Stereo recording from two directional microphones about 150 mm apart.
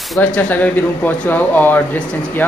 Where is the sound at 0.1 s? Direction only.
10° left (ahead or behind).